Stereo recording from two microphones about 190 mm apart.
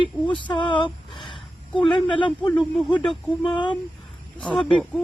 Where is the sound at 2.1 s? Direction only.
25° left (ahead or behind).